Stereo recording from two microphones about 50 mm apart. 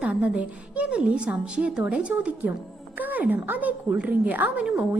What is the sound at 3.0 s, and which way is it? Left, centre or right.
A woman's voice, right.